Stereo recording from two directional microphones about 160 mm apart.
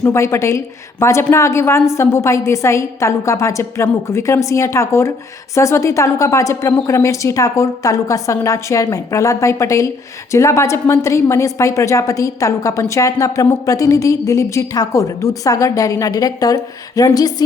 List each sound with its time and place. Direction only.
0.0 s a woman's voice: 15° left (ahead or behind)